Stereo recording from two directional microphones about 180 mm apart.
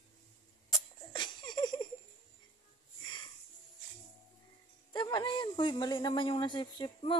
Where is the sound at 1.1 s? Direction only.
25° left (ahead or behind).